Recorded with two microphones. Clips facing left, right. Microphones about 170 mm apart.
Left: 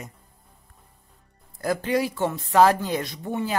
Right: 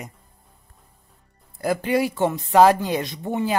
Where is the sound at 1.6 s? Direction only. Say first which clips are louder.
Right 2 dB; 10° right (ahead or behind).